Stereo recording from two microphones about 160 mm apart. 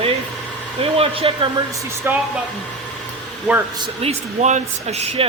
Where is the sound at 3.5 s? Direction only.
5° right (ahead or behind).